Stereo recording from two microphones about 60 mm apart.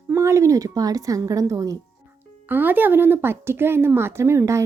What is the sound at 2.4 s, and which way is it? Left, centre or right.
Speech, right.